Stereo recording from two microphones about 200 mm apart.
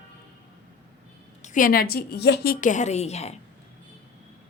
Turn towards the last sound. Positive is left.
turn(degrees=30)  # may be behind; listen again after turning